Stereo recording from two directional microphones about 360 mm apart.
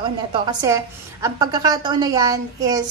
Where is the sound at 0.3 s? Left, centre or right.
Centre.